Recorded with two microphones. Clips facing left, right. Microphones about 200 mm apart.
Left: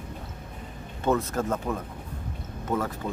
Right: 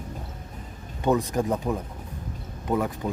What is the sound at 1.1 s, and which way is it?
Speech, 15° right (ahead or behind).